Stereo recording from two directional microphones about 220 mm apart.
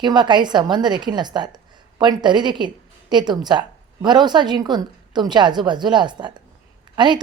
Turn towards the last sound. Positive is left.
turn(degrees=-20)  # may be behind; listen again after turning